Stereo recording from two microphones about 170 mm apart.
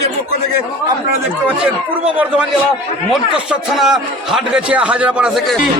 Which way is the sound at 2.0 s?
10° right (ahead or behind).